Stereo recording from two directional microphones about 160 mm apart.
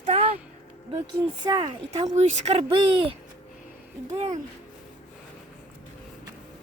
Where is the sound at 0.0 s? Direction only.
35° right (ahead or behind).